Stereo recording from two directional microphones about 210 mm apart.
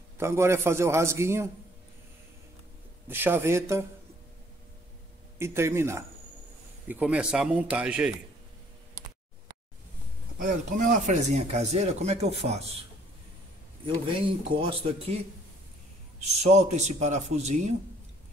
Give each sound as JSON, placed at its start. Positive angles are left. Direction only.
{"t": 0.2, "sound": "a man's voice", "side_deg": -10}
{"t": 3.1, "sound": "a man's voice", "side_deg": -10}
{"t": 5.4, "sound": "a man's voice", "side_deg": -10}
{"t": 10.4, "sound": "speech", "side_deg": -35}
{"t": 13.8, "sound": "speech", "side_deg": -25}
{"t": 16.2, "sound": "speech", "side_deg": -35}